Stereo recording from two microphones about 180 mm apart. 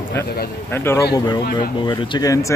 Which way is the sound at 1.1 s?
25° left (ahead or behind).